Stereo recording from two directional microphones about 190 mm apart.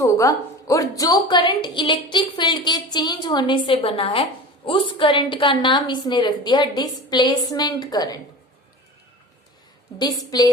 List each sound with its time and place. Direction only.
0.0 s a woman's voice: 15° left (ahead or behind)
10.0 s a woman's voice: 20° left (ahead or behind)